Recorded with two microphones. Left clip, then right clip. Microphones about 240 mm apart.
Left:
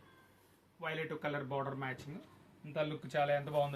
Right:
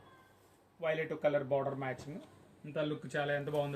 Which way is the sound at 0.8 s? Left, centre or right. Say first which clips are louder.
Right 5 dB; centre.